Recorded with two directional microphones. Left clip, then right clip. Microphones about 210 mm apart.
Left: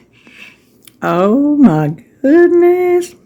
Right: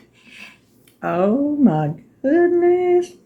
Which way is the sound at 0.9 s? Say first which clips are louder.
Left 6 dB; 55° left (ahead or behind).